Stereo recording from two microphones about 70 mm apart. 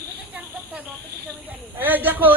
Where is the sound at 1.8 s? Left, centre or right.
Right.